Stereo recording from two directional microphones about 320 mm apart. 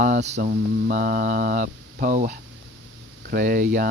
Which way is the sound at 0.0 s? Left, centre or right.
Right.